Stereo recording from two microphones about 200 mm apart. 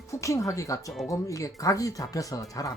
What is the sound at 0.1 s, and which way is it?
Speech, 15° left (ahead or behind).